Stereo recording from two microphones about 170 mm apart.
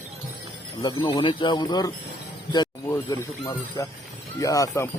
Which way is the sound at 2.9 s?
20° left (ahead or behind).